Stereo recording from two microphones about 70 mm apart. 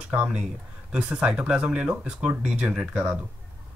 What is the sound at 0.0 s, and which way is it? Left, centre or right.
Speech, centre.